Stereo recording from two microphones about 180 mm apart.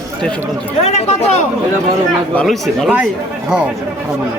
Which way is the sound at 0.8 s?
35° left (ahead or behind).